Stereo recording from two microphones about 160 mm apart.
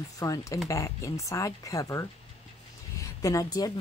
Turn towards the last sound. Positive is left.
turn(degrees=25)  # may be behind; listen again after turning